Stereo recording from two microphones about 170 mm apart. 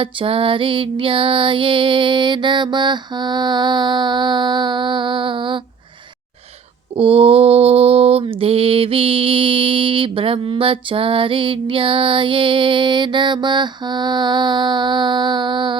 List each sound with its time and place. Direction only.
0.0 s music: 30° right (ahead or behind)
6.9 s mantra: 35° right (ahead or behind)